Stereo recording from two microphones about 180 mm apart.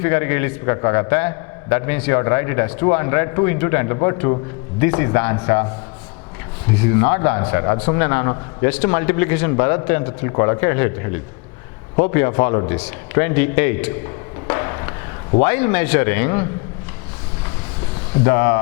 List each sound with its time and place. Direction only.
0.0 s a man's voice: 15° left (ahead or behind)
6.7 s a man's voice: 15° left (ahead or behind)
14.4 s a sound: 20° left (ahead or behind)
15.4 s a man's voice: 15° left (ahead or behind)
18.3 s a man's voice: 15° left (ahead or behind)